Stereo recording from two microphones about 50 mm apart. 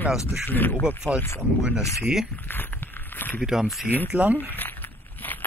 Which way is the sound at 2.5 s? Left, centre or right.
Left.